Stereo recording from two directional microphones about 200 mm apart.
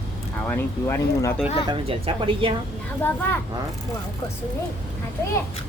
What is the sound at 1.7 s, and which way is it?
Speech, 25° right (ahead or behind).